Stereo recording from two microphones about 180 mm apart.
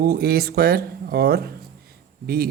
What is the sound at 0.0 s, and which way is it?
A man's voice, 60° right (ahead or behind).